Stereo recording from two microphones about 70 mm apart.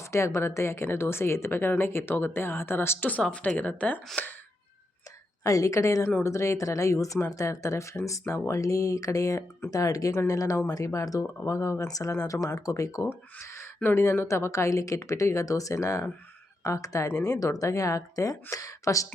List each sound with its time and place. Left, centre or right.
0.0 s a woman's voice: left
3.1 s a woman's voice: centre
5.4 s speech: left
9.6 s speech: left
11.9 s speech: left
13.0 s speech: left